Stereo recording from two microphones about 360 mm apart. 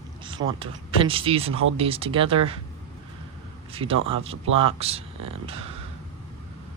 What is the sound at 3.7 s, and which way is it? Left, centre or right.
Speech, centre.